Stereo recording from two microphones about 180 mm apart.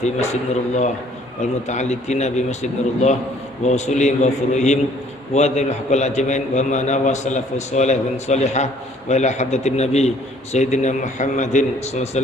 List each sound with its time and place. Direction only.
0.0 s a man's voice: 40° left (ahead or behind)